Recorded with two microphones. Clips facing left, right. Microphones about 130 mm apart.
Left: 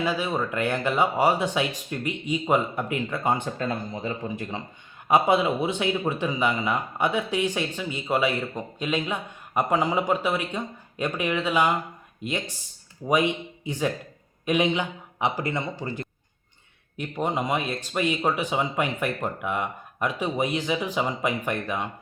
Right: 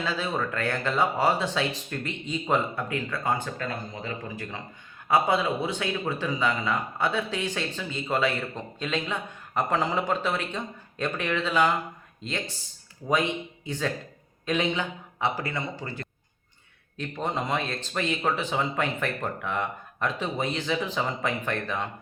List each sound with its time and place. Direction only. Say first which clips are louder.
0.0 s speech: left 3 dB; 15° left (ahead or behind)